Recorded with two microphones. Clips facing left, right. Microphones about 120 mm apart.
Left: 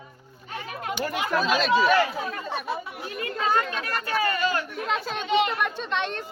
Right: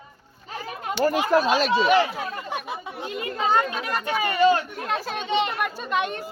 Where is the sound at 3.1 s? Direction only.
20° right (ahead or behind).